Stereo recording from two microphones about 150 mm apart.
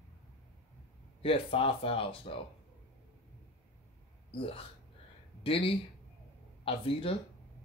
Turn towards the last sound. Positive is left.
turn(degrees=40)  # may be behind; listen again after turning